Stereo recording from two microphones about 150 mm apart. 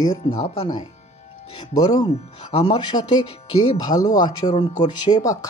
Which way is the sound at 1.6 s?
45° left (ahead or behind).